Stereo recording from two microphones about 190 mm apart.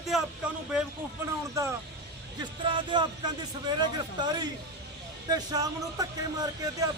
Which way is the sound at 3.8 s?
20° right (ahead or behind).